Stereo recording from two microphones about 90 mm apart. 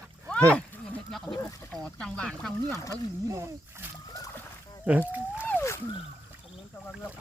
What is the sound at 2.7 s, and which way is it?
Speech, 35° left (ahead or behind).